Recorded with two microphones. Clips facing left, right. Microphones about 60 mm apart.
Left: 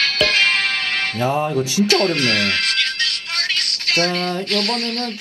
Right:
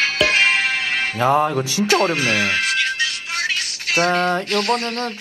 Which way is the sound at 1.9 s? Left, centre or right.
Centre.